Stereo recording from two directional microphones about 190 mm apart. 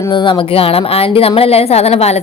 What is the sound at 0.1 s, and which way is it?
A woman's voice, 25° left (ahead or behind).